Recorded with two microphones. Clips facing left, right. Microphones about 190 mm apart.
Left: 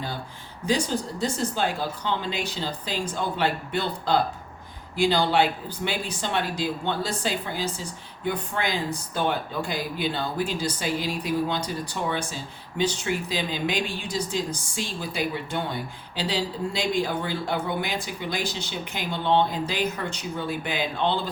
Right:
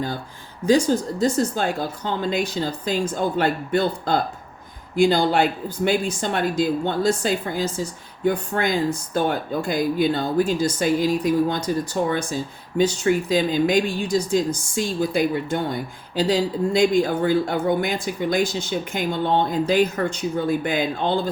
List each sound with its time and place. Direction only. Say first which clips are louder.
1.2 s speech: right 5 dB; 45° right (ahead or behind)